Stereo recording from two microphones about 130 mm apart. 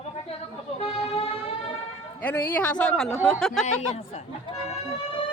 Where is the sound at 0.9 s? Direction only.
50° left (ahead or behind).